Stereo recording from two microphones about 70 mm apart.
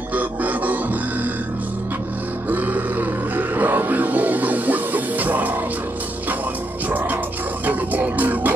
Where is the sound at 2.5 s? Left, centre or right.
Right.